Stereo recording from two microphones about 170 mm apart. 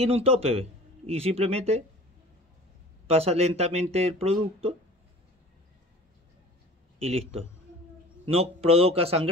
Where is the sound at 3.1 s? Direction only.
40° right (ahead or behind).